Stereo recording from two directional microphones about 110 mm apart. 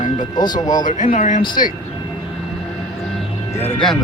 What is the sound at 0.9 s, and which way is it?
Speech, 90° left.